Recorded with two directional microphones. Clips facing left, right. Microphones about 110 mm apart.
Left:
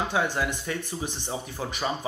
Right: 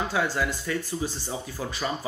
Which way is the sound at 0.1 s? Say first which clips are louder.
Even; 20° left (ahead or behind).